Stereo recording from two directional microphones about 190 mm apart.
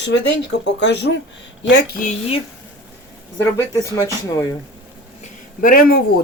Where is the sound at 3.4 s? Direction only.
15° left (ahead or behind).